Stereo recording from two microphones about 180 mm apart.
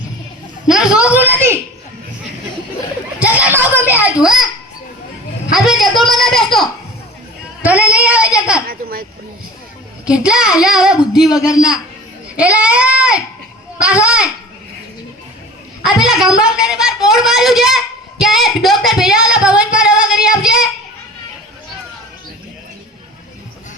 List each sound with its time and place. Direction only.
0.7 s a sound: 5° right (ahead or behind)
3.2 s children playing: 10° right (ahead or behind)
5.5 s a sound: centre (ahead or behind)
7.6 s speech: 5° right (ahead or behind)
8.6 s speech: 55° right (ahead or behind)
10.1 s a woman's voice: 5° right (ahead or behind)
11.4 s a man's voice: 20° left (ahead or behind)
12.4 s a sound: 5° right (ahead or behind)
13.7 s a woman's voice: 5° right (ahead or behind)
15.8 s a woman's voice: centre (ahead or behind)